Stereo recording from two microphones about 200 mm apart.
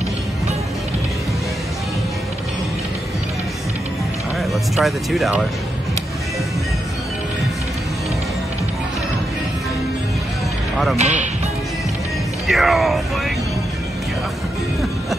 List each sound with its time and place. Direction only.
4.4 s speech: centre (ahead or behind)
11.0 s speech: 35° right (ahead or behind)
12.4 s speech: centre (ahead or behind)